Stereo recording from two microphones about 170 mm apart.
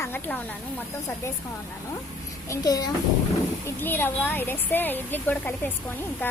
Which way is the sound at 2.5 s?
20° left (ahead or behind).